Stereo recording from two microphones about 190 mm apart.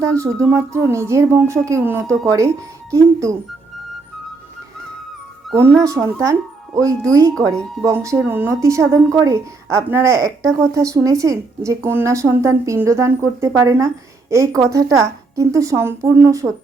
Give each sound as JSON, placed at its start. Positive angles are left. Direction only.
{"t": 0.0, "sound": "speech", "side_deg": -15}
{"t": 5.7, "sound": "speech", "side_deg": -15}